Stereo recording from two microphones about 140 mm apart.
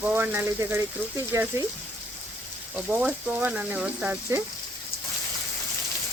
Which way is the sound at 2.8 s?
10° right (ahead or behind).